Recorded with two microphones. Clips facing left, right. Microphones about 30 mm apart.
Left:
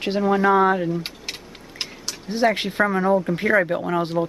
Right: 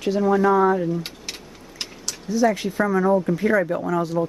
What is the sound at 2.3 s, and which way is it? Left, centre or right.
Speech, left.